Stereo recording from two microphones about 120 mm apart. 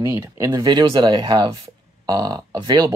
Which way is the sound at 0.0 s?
25° right (ahead or behind).